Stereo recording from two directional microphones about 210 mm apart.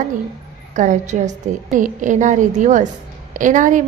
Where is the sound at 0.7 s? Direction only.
35° right (ahead or behind).